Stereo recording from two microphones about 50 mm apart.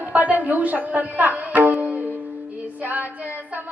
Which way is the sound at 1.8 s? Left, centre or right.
Right.